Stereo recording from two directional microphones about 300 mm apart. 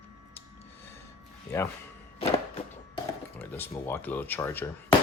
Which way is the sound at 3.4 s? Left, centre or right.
Centre.